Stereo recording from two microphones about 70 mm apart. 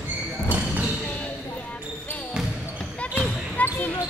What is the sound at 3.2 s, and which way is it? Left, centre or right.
Basketball bounce, left.